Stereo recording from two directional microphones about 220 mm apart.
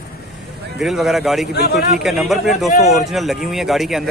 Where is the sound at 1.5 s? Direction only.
50° left (ahead or behind).